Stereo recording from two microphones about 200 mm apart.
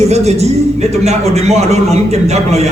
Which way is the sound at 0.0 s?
35° right (ahead or behind).